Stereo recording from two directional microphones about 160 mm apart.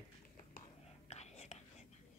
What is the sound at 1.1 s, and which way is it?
Whispering, 45° left (ahead or behind).